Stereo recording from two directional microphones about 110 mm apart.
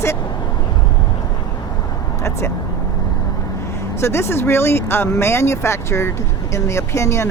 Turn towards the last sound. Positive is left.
turn(degrees=25)  # may be behind; listen again after turning